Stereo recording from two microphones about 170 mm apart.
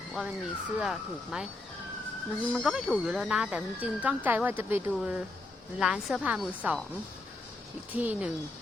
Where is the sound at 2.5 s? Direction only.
Centre (ahead or behind).